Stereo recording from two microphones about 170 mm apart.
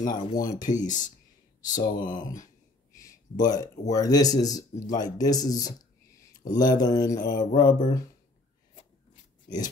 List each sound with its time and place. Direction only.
0.1 s mantra: 20° left (ahead or behind)
0.7 s speech: 50° left (ahead or behind)
1.8 s mantra: 25° left (ahead or behind)
3.0 s a sound: 20° left (ahead or behind)
3.9 s mantra: 20° left (ahead or behind)